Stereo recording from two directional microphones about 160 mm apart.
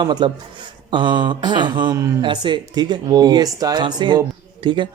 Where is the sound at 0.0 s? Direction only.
30° right (ahead or behind).